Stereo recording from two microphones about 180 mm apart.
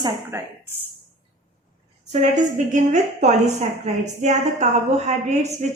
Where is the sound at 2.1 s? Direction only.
40° right (ahead or behind).